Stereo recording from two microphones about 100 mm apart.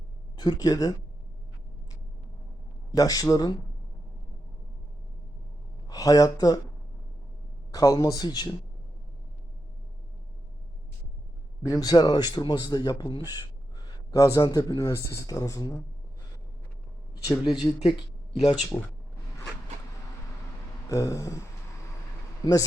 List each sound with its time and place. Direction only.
0.3 s speech: 45° left (ahead or behind)
2.9 s speech: 40° left (ahead or behind)
5.9 s speech: 40° left (ahead or behind)
7.7 s speech: 35° left (ahead or behind)
11.6 s a man's voice: 35° left (ahead or behind)
17.4 s speech: 45° left (ahead or behind)
18.7 s speech: 30° left (ahead or behind)
20.8 s speech: 30° left (ahead or behind)